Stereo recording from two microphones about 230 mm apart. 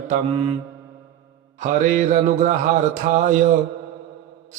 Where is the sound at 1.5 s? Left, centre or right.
Right.